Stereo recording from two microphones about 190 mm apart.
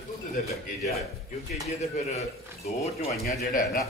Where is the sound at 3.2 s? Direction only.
55° left (ahead or behind).